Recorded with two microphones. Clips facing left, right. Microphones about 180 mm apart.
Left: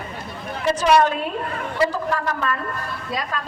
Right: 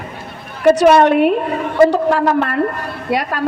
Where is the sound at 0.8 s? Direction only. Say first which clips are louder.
Right 5 dB; 65° right (ahead or behind).